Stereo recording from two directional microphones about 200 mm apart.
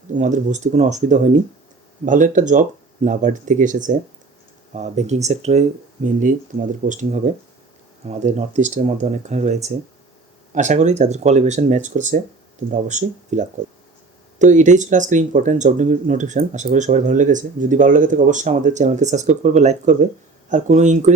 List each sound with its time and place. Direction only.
0.2 s speech: 40° right (ahead or behind)